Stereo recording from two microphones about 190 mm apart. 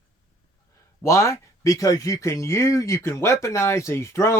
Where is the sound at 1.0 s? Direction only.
15° left (ahead or behind).